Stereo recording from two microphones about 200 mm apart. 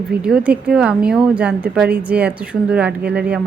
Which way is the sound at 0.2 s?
5° right (ahead or behind).